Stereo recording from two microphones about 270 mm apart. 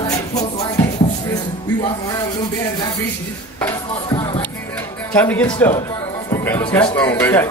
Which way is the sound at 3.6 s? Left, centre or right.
Centre.